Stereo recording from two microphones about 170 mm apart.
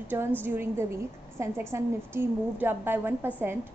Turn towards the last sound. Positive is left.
turn(degrees=-10)  # may be behind; listen again after turning